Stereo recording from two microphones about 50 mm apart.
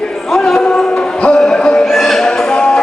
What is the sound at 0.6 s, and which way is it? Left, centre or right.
Music, centre.